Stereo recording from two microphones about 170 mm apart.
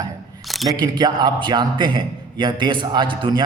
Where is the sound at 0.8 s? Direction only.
25° right (ahead or behind).